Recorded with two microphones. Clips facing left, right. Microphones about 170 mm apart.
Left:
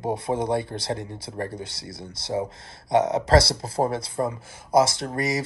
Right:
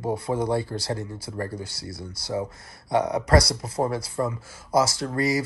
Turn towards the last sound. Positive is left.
turn(degrees=20)  # may be behind; listen again after turning